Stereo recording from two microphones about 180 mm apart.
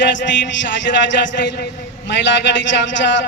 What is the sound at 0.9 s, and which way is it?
Speech, 50° left (ahead or behind).